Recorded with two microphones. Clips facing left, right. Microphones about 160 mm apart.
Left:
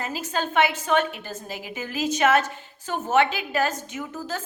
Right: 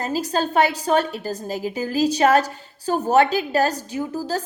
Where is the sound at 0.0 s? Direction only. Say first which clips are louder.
Right 6 dB; 35° right (ahead or behind).